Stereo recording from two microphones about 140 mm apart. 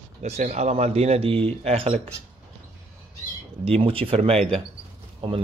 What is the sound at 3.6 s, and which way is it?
Speech, 45° right (ahead or behind).